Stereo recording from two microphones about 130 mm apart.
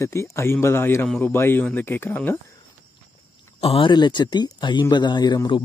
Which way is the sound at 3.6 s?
45° left (ahead or behind).